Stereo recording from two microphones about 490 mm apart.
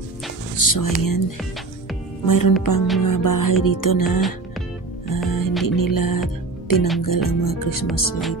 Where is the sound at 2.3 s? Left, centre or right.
Left.